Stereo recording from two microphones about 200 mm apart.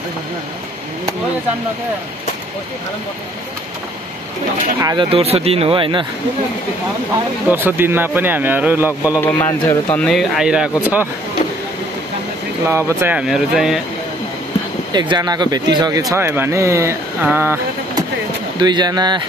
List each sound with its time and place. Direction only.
4.7 s speech: 15° right (ahead or behind)
5.1 s speech: 30° right (ahead or behind)
7.4 s speech: 10° right (ahead or behind)
9.2 s speech: 10° left (ahead or behind)
10.0 s speech: centre (ahead or behind)
12.6 s speech: 10° right (ahead or behind)
14.9 s speech: 20° right (ahead or behind)
18.6 s speech: 20° right (ahead or behind)